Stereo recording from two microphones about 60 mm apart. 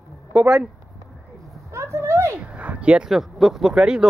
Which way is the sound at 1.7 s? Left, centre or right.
Right.